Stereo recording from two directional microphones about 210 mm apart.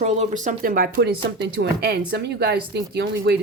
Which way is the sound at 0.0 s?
35° right (ahead or behind).